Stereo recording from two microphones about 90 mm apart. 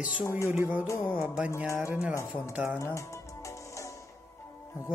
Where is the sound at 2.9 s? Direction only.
35° left (ahead or behind).